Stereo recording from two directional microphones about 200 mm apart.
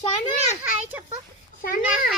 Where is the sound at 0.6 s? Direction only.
10° right (ahead or behind).